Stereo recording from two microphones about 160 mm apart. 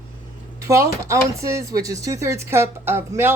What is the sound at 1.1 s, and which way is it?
Speech, 20° right (ahead or behind).